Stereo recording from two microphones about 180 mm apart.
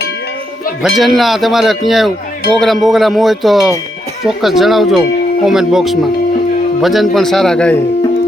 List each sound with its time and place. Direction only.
0.8 s a man's voice: centre (ahead or behind)